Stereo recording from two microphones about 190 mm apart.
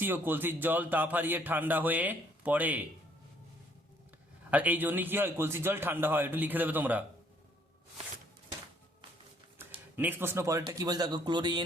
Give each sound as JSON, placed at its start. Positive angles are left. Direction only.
{"t": 0.0, "sound": "speech", "side_deg": -10}
{"t": 4.5, "sound": "speech", "side_deg": -10}
{"t": 9.9, "sound": "speech", "side_deg": -10}